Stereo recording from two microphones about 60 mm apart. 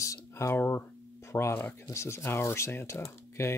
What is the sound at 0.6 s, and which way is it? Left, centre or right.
Speech, left.